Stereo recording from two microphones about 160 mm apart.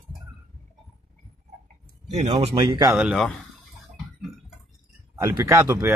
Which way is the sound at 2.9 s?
5° right (ahead or behind).